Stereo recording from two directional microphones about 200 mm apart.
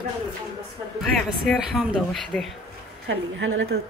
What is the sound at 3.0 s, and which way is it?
Speech, 70° right (ahead or behind).